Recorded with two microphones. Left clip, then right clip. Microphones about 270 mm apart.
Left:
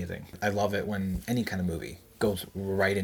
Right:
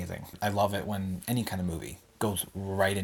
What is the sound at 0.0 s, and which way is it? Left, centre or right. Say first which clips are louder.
Speech: left 2 dB; right.